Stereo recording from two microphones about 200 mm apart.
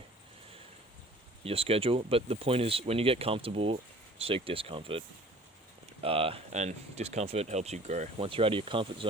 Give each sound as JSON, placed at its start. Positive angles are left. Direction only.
{"t": 1.5, "sound": "speech", "side_deg": -30}